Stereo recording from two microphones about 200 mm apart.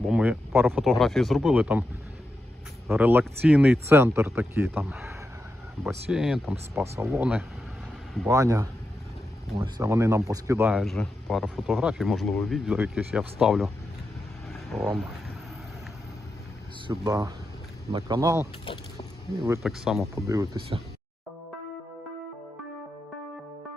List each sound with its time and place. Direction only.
0.1 s speech: 5° right (ahead or behind)
2.9 s speech: 10° right (ahead or behind)
14.5 s a sound: centre (ahead or behind)
16.8 s speech: 15° right (ahead or behind)
18.6 s a sound: 25° left (ahead or behind)
19.6 s speech: centre (ahead or behind)
20.2 s speech: 15° right (ahead or behind)